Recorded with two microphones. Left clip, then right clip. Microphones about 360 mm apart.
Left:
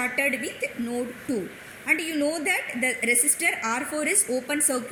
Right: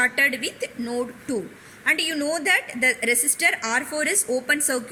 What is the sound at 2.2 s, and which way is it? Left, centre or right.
Speech, right.